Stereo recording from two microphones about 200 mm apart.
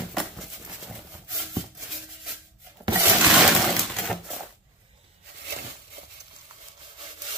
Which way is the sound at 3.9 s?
Centre (ahead or behind).